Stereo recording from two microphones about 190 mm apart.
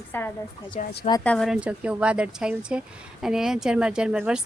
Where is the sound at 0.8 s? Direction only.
40° left (ahead or behind).